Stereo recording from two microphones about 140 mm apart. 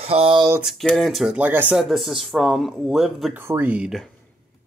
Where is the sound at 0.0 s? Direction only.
45° right (ahead or behind).